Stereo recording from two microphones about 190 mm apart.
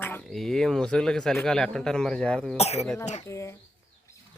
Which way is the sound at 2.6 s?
35° left (ahead or behind).